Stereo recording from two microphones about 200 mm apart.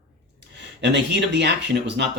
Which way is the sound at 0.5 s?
60° right (ahead or behind).